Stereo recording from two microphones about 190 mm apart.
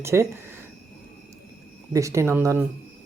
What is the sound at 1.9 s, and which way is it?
Speech, 15° right (ahead or behind).